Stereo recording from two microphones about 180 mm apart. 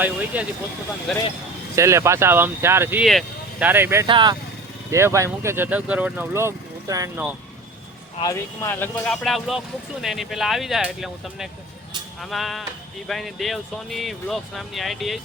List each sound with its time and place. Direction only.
0.3 s speech: 5° right (ahead or behind)
1.7 s speech: 15° right (ahead or behind)
3.0 s speech: centre (ahead or behind)
3.7 s speech: 10° right (ahead or behind)
4.0 s speech: 25° right (ahead or behind)
4.9 s speech: 15° right (ahead or behind)
8.2 s speech: 15° left (ahead or behind)
9.2 s speech: centre (ahead or behind)